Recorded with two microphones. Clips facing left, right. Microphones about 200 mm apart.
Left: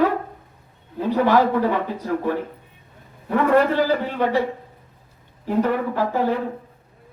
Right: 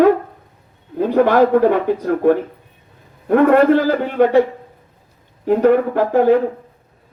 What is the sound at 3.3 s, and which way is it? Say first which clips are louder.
A man's voice: right 6 dB; 55° right (ahead or behind).